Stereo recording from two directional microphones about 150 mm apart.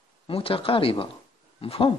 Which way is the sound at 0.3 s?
40° left (ahead or behind).